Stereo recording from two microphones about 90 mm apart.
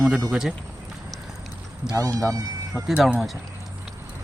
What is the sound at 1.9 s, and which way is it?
Speech, 40° right (ahead or behind).